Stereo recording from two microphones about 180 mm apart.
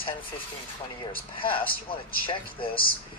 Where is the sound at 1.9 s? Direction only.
30° left (ahead or behind).